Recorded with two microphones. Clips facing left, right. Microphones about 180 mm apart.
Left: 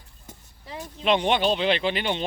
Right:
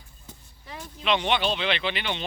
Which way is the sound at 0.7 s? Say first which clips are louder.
Left 3 dB; 25° left (ahead or behind).